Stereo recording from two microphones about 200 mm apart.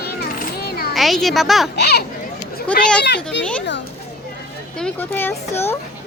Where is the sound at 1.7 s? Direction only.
55° left (ahead or behind).